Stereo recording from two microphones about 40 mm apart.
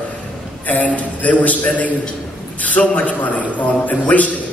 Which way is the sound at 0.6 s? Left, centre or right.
Left.